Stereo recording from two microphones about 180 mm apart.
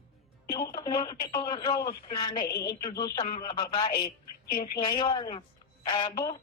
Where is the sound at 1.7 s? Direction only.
55° left (ahead or behind).